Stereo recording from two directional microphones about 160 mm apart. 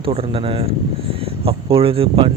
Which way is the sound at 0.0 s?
35° right (ahead or behind).